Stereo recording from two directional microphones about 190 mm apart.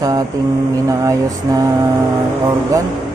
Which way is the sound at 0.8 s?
15° right (ahead or behind).